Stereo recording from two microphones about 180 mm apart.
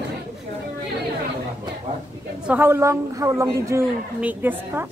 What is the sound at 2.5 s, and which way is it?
A woman's voice, 10° right (ahead or behind).